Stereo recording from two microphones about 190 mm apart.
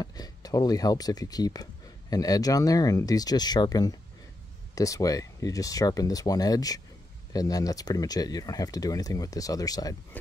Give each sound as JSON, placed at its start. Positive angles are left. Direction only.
{"t": 0.0, "sound": "speech", "side_deg": 20}